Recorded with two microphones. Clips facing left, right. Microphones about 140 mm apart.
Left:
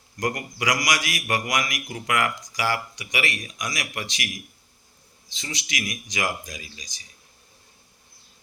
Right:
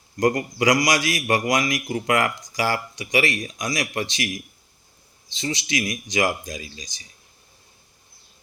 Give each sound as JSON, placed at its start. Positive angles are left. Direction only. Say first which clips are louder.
{"t": 0.2, "sound": "a man's voice", "louder": "right 7 dB", "side_deg": -30}
{"t": 5.3, "sound": "a man's voice", "louder": "right 8 dB", "side_deg": -30}